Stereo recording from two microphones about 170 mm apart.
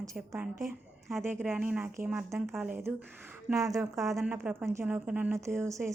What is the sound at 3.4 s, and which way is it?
A woman's voice, 20° right (ahead or behind).